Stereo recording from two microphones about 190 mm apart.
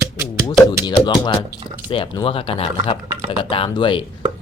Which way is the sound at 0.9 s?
25° left (ahead or behind).